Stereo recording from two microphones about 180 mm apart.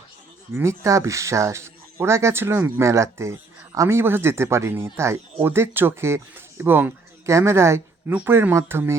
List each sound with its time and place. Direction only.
0.5 s a man's voice: 15° right (ahead or behind)